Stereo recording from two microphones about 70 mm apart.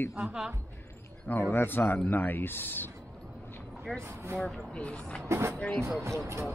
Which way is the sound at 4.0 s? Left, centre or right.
Right.